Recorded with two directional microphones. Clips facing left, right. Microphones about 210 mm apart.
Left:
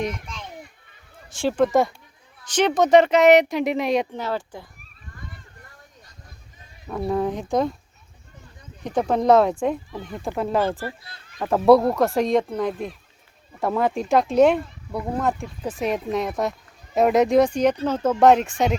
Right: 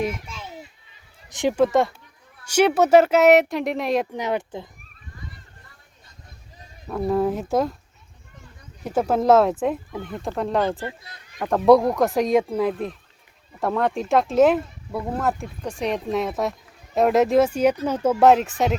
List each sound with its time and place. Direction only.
0.3 s a sound: 5° right (ahead or behind)
1.3 s speech: 15° right (ahead or behind)
1.6 s speech: centre (ahead or behind)
2.4 s speech: 10° right (ahead or behind)
4.1 s speech: 20° right (ahead or behind)
6.8 s speech: centre (ahead or behind)
8.8 s speech: 5° right (ahead or behind)
10.7 s speech: 20° right (ahead or behind)
11.3 s speech: 5° left (ahead or behind)